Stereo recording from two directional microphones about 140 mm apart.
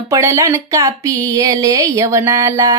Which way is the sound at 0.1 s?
20° right (ahead or behind).